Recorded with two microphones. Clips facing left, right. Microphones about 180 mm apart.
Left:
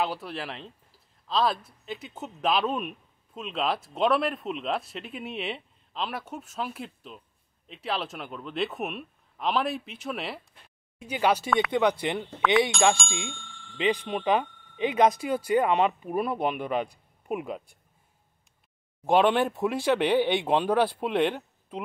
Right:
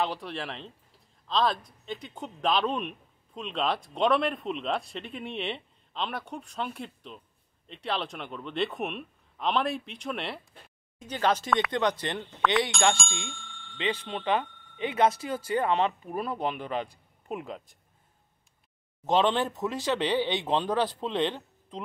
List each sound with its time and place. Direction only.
0.0 s speech: 5° left (ahead or behind)
12.7 s speech: centre (ahead or behind)
13.3 s bicycle bell: centre (ahead or behind)
13.7 s speech: 15° left (ahead or behind)
19.0 s speech: 10° left (ahead or behind)